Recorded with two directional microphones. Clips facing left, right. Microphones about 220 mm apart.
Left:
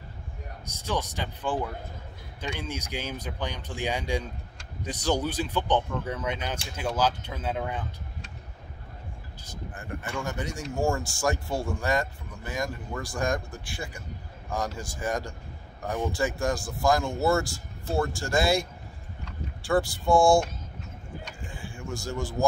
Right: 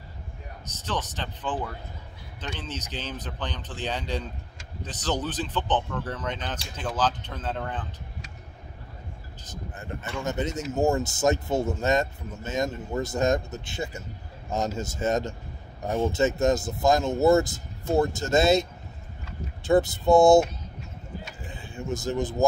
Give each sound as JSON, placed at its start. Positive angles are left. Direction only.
{"t": 0.7, "sound": "speech", "side_deg": 10}
{"t": 9.7, "sound": "speech", "side_deg": -20}
{"t": 21.5, "sound": "a sound", "side_deg": -20}